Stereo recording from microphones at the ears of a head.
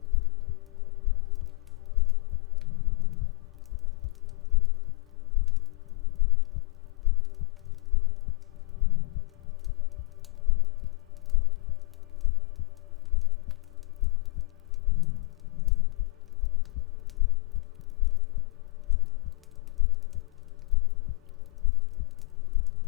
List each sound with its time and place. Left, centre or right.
2.6 s music: left
8.8 s music: left
14.8 s a sound: left